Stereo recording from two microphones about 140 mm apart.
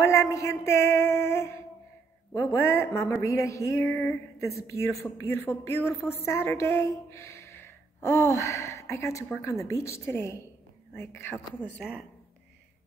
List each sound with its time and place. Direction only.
0.0 s speech: 20° left (ahead or behind)
2.6 s a woman's voice: 20° left (ahead or behind)